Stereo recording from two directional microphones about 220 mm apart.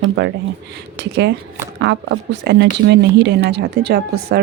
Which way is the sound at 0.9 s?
50° right (ahead or behind).